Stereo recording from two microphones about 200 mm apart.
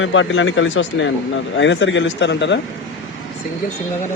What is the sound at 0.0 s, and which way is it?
Speech, 70° left (ahead or behind).